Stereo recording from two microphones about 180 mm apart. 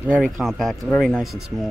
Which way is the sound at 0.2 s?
Centre (ahead or behind).